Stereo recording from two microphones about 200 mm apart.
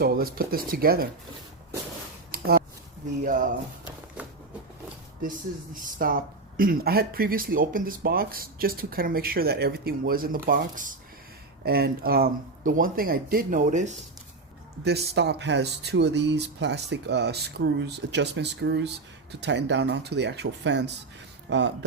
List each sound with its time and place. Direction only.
0.0 s speech: 45° right (ahead or behind)
2.3 s a sound: 45° right (ahead or behind)
5.8 s speech: 45° right (ahead or behind)
14.8 s speech: 55° right (ahead or behind)